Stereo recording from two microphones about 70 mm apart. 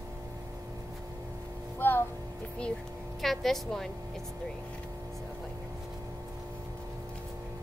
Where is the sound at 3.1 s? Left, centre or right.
Centre.